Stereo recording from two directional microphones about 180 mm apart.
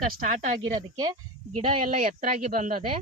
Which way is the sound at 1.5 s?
40° right (ahead or behind).